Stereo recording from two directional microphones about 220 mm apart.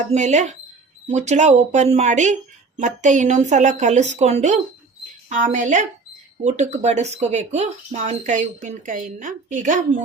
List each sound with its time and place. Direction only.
0.1 s speech: 30° right (ahead or behind)
6.8 s speech: 30° right (ahead or behind)